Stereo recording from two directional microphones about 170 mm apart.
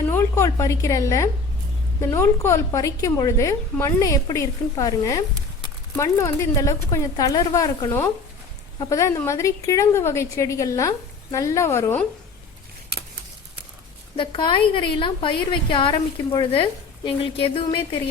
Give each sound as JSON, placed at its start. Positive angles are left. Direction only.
{"t": 0.1, "sound": "a sound", "side_deg": 15}
{"t": 2.0, "sound": "a woman's voice", "side_deg": 15}
{"t": 14.2, "sound": "a woman's voice", "side_deg": 30}